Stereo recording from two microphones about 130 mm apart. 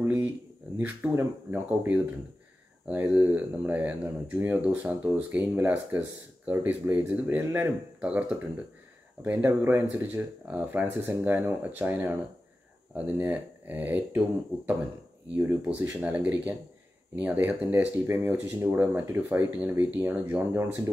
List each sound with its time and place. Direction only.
0.0 s speech: 15° right (ahead or behind)
15.3 s speech: 10° right (ahead or behind)